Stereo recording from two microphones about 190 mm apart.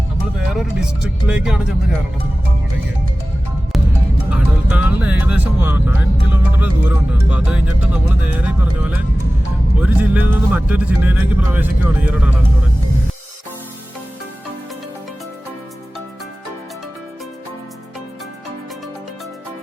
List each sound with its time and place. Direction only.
0.3 s speech: centre (ahead or behind)
4.3 s speech: 5° right (ahead or behind)